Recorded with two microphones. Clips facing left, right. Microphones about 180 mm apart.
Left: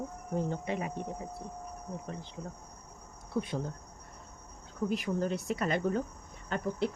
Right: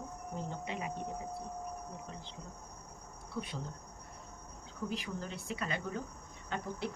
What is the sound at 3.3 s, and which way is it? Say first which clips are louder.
Speech: left 8 dB; 50° left (ahead or behind).